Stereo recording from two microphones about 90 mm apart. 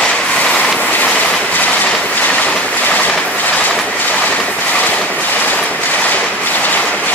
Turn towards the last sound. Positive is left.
turn(degrees=15)  # may be behind; listen again after turning